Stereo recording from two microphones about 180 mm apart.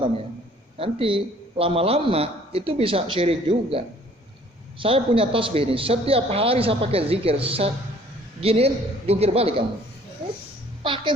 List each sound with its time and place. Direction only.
0.8 s a man's voice: 30° right (ahead or behind)
10.8 s a child's voice: 30° right (ahead or behind)